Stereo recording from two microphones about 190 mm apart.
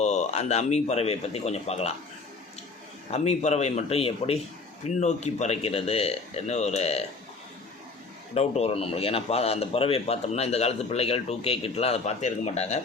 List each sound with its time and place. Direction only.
0.0 s speech: 35° left (ahead or behind)
3.1 s speech: 35° left (ahead or behind)
8.3 s speech: 35° left (ahead or behind)